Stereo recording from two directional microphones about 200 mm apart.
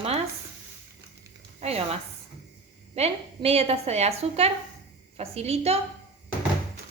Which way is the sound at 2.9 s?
30° right (ahead or behind).